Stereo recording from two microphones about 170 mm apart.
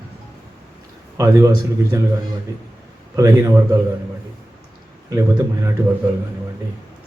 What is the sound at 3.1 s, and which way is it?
Speech, 15° right (ahead or behind).